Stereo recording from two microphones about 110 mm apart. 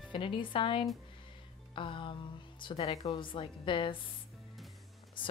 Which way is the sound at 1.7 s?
50° left (ahead or behind).